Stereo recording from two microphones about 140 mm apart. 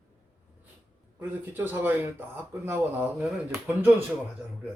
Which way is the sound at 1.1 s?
15° right (ahead or behind).